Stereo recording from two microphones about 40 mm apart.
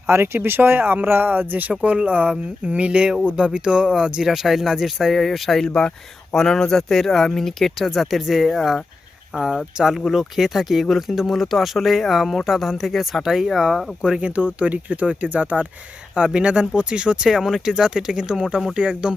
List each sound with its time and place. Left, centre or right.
0.1 s speech: right
1.3 s speech: right
1.8 s speech: right; by 4.3 s centre
4.3 s speech: centre
5.1 s speech: centre
5.6 s speech: centre
6.7 s speech: centre
9.3 s speech: centre
10.1 s speech: centre
14.2 s speech: right
16.1 s speech: right
17.2 s speech: centre; by 19.1 s right